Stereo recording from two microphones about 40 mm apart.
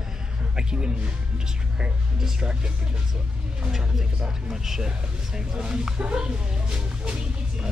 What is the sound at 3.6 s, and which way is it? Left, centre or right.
Speech, centre.